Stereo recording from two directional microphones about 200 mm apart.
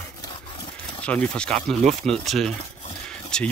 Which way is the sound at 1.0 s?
5° left (ahead or behind).